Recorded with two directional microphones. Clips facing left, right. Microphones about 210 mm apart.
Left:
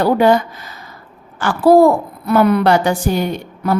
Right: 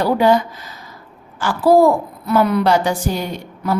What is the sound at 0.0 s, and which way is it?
A woman's voice, 55° left (ahead or behind).